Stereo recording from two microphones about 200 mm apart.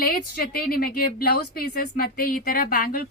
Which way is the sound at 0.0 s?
50° left (ahead or behind).